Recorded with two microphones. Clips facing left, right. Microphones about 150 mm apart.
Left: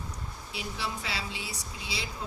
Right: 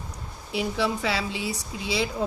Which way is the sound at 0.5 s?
90° right.